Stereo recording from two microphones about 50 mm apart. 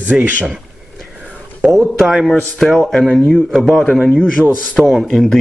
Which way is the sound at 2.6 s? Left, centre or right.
Centre.